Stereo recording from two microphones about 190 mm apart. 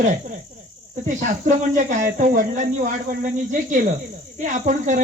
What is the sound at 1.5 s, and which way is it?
Speech, 40° right (ahead or behind).